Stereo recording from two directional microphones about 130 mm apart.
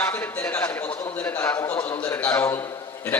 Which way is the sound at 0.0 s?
15° left (ahead or behind).